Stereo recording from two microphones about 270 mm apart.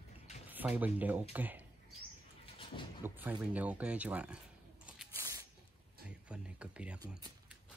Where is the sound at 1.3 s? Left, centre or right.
Centre.